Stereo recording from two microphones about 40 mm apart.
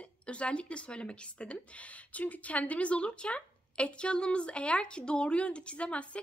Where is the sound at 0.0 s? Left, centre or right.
Left.